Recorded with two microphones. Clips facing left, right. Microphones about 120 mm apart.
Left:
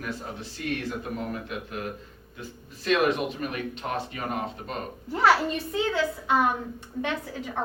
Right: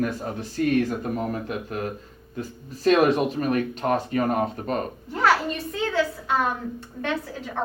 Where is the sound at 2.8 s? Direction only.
40° right (ahead or behind).